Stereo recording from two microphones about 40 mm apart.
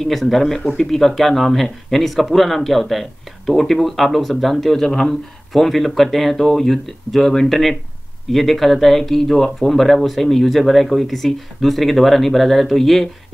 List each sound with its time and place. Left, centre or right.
0.0 s speech: centre